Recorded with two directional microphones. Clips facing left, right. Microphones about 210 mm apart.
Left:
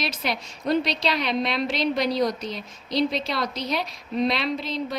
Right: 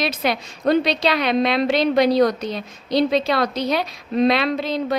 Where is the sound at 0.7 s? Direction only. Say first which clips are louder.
Right 6 dB; 65° right (ahead or behind).